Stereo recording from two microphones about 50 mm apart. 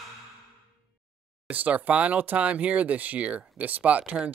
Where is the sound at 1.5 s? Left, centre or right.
Right.